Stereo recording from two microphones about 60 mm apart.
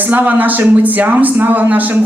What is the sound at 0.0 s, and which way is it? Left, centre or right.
Speech, right.